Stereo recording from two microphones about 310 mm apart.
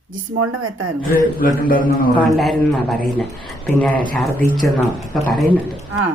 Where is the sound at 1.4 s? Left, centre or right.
Left.